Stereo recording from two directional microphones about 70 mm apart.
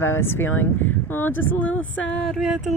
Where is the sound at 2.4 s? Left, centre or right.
Centre.